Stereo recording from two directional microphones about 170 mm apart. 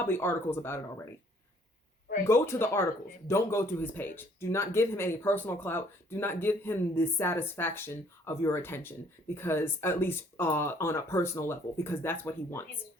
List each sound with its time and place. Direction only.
0.0 s speech: 10° left (ahead or behind)
2.2 s speech: 15° left (ahead or behind)